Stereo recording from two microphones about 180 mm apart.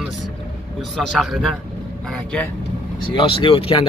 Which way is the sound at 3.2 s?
25° left (ahead or behind).